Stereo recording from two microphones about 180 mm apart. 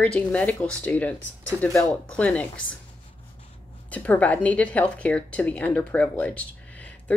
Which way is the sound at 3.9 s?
10° left (ahead or behind).